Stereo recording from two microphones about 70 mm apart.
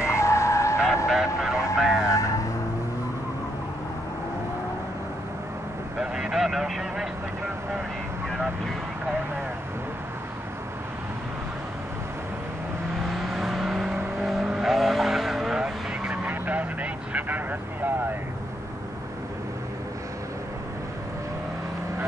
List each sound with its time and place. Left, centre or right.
0.1 s vehicle: left
1.0 s vehicle: centre
2.0 s vehicle: left
5.9 s a sound: centre
13.1 s vehicle: centre; by 17.9 s right